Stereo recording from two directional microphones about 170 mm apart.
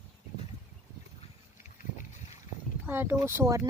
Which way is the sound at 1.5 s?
45° left (ahead or behind).